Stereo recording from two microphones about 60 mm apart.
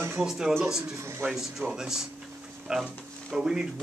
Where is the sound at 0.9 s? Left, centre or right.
Right.